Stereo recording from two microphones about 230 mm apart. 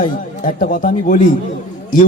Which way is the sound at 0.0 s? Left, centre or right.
Left.